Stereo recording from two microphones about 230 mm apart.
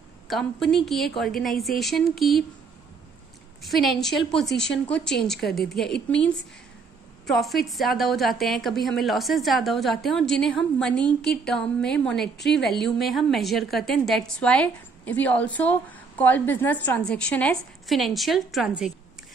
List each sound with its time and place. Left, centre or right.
0.3 s a woman's voice: centre
3.6 s a woman's voice: centre
7.2 s a woman's voice: centre
12.4 s a woman's voice: left
12.6 s a woman's voice: centre